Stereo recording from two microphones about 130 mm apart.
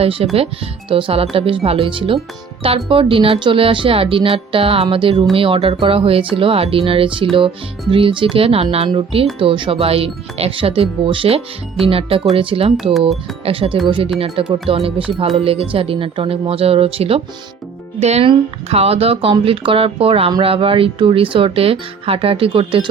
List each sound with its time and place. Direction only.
0.0 s speech: 50° right (ahead or behind)
8.9 s speech: 35° right (ahead or behind)